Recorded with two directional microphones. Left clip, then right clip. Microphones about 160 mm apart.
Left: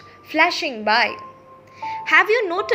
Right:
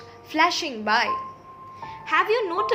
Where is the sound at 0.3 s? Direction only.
20° left (ahead or behind).